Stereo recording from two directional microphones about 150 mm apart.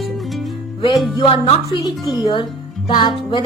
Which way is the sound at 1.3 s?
35° left (ahead or behind).